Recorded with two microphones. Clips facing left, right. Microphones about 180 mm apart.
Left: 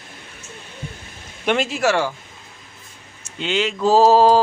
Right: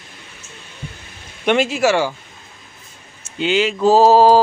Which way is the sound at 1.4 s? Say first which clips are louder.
Right 3 dB; centre (ahead or behind).